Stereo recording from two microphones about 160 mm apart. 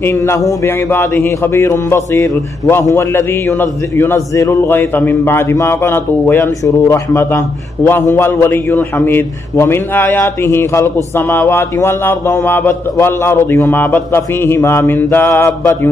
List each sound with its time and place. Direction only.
0.0 s speech: 15° left (ahead or behind)